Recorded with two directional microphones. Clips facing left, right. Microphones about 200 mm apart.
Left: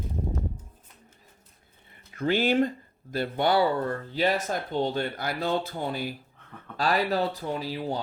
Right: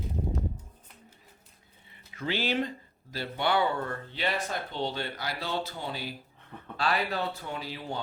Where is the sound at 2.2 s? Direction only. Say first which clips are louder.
Left 7 dB; 50° left (ahead or behind).